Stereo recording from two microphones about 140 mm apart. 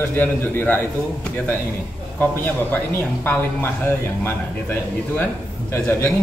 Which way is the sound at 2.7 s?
15° left (ahead or behind).